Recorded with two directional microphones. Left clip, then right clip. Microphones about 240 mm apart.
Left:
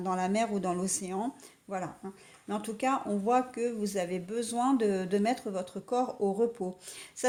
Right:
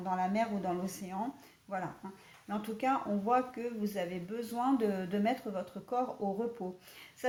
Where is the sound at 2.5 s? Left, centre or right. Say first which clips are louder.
Left 2 dB; left.